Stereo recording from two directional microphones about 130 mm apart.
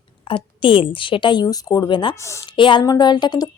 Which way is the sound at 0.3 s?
40° left (ahead or behind).